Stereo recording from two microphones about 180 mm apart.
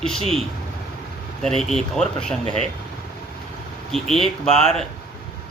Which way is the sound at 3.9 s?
Centre (ahead or behind).